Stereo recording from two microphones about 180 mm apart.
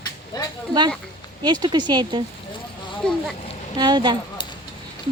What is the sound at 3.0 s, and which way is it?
Speech, 5° left (ahead or behind).